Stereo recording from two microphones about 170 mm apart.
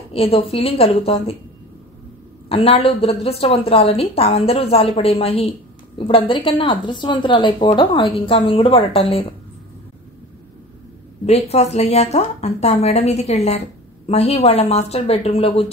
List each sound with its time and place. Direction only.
0.1 s speech: 35° left (ahead or behind)
2.5 s speech: 35° left (ahead or behind)
11.2 s speech: 35° left (ahead or behind)